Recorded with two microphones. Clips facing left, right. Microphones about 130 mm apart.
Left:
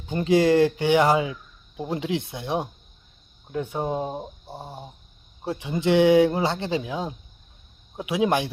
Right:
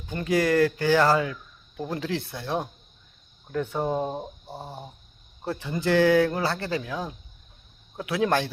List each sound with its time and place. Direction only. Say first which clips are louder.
0.1 s speech: left 4 dB; 25° left (ahead or behind)